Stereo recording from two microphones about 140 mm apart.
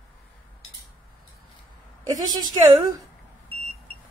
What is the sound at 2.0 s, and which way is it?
Speech, 30° right (ahead or behind).